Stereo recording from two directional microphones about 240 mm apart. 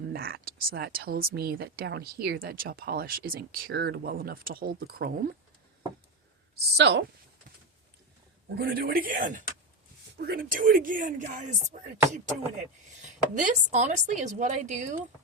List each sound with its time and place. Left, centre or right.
0.1 s speech: right
6.7 s speech: right
8.5 s speech: right